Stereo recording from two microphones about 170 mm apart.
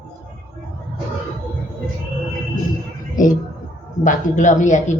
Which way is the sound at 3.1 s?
50° left (ahead or behind).